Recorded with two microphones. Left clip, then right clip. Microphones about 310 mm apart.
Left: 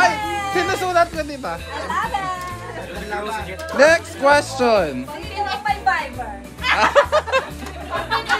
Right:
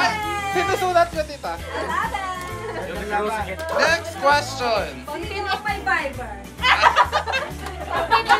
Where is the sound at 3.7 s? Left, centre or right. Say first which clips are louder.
Left 6 dB; centre.